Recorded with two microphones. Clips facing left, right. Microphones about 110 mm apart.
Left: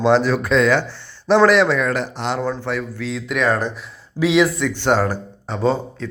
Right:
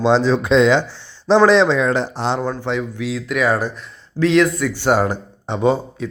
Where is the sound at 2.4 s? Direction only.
15° right (ahead or behind).